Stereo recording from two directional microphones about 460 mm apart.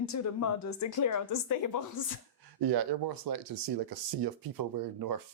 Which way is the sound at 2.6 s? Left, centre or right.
Right.